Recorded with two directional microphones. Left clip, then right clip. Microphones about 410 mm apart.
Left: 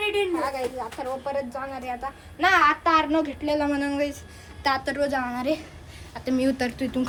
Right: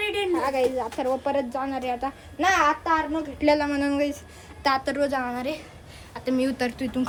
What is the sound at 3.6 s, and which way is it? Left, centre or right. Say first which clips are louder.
A woman's voice: even; centre.